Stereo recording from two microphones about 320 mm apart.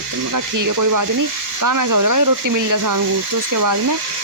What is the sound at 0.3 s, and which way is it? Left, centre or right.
Speech, right.